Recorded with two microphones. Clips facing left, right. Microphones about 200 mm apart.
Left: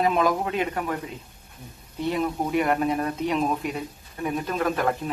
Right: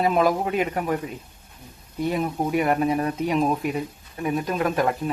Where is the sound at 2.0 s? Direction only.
10° right (ahead or behind).